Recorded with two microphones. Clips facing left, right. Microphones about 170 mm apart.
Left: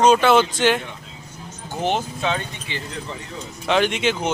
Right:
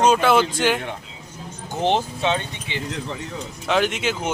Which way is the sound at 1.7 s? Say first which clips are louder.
Right 2 dB; 30° right (ahead or behind).